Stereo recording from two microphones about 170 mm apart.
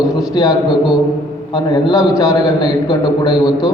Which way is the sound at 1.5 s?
25° left (ahead or behind).